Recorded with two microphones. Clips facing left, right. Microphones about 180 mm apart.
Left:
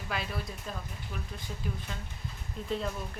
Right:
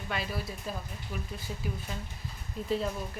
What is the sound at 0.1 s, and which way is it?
Speech, centre (ahead or behind).